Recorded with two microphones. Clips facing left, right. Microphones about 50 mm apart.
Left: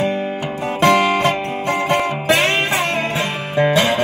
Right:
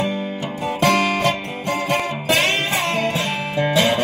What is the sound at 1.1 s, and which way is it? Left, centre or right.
Music, left.